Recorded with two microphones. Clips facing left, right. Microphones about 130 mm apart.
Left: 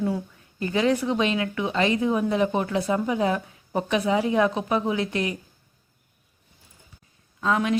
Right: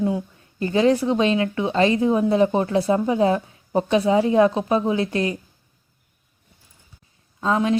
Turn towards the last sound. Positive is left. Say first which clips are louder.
# right 3 dB
turn(degrees=-30)  # may be behind; listen again after turning